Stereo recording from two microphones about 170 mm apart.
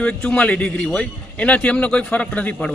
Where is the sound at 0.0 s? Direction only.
5° left (ahead or behind).